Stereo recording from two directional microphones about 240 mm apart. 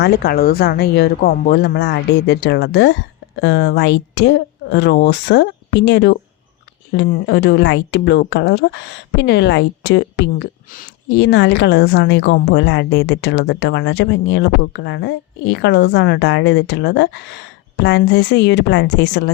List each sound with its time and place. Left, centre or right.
0.0 s a woman's voice: left